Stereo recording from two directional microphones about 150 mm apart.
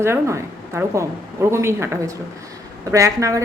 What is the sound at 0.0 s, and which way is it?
A woman's voice, 20° right (ahead or behind).